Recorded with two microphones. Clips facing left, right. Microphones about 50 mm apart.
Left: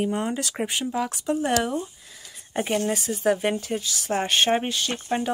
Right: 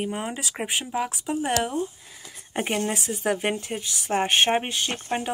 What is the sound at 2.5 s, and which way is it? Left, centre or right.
A woman's voice, right.